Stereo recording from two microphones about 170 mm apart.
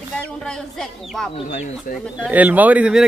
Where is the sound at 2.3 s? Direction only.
10° right (ahead or behind).